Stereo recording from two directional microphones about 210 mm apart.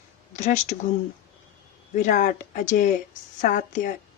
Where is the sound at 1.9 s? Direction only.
40° left (ahead or behind).